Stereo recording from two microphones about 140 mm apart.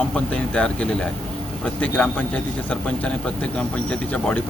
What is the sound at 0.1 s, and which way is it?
Speech, 10° left (ahead or behind).